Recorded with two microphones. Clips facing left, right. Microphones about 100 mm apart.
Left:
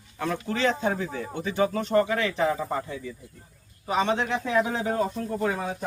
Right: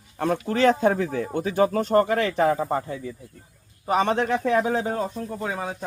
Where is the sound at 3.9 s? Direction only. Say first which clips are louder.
Right 3 dB; 55° right (ahead or behind).